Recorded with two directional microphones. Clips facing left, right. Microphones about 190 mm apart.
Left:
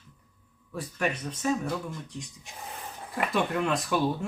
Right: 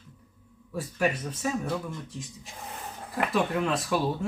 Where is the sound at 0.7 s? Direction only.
5° right (ahead or behind).